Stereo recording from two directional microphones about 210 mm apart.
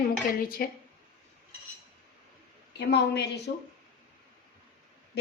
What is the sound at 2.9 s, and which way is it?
Speech, 55° left (ahead or behind).